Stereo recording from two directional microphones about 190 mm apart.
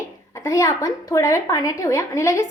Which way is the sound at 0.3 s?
15° left (ahead or behind).